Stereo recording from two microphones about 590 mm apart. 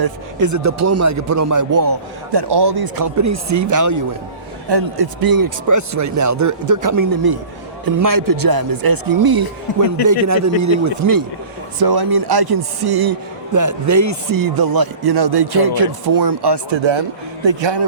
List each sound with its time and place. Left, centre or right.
0.0 s a man's voice: right
9.7 s a man's voice: left
10.1 s a man's voice: right